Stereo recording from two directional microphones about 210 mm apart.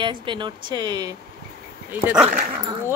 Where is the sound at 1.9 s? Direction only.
5° right (ahead or behind).